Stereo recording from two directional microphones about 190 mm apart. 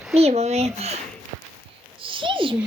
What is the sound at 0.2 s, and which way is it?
Speech, 35° right (ahead or behind).